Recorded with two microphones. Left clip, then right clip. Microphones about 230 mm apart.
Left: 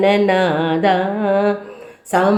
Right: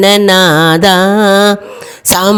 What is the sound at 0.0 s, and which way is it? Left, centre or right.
Mantra, right.